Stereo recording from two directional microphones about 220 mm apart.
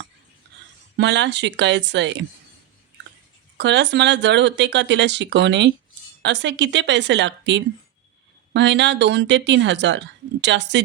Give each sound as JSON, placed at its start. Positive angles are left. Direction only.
{"t": 0.9, "sound": "speech", "side_deg": -50}
{"t": 3.6, "sound": "speech", "side_deg": -55}